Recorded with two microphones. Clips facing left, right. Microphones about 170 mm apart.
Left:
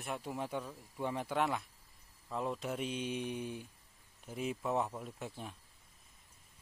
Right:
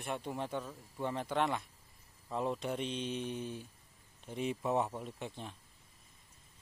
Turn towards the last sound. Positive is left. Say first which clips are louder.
# right 1 dB
turn(degrees=5)  # may be behind; listen again after turning